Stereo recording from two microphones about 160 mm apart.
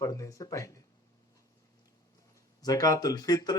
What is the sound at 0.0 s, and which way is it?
Speech, 20° left (ahead or behind).